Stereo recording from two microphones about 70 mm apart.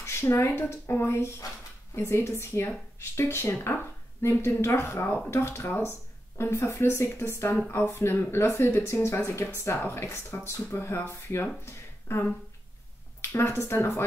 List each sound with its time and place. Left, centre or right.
0.0 s speech: left
11.6 s a sound: left
13.2 s speech: left